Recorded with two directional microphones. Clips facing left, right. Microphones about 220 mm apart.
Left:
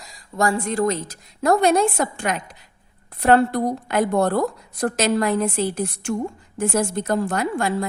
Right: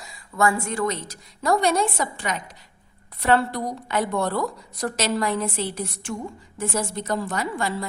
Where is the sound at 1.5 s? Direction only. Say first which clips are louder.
Left 4 dB; 45° left (ahead or behind).